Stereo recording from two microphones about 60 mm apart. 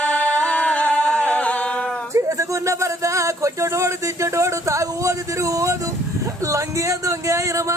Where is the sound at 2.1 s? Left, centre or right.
Right.